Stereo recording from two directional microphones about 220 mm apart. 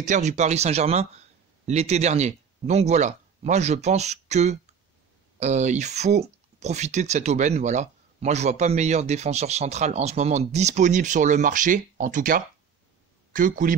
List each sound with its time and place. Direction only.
0.0 s speech: 30° right (ahead or behind)